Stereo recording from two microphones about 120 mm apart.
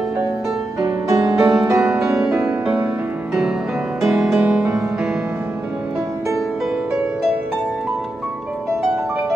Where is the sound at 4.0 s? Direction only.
5° right (ahead or behind).